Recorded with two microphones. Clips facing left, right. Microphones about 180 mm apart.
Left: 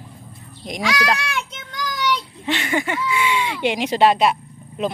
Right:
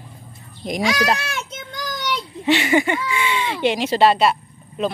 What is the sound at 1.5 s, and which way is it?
Child singing, 45° right (ahead or behind).